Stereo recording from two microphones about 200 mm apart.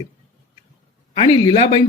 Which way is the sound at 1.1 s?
25° left (ahead or behind).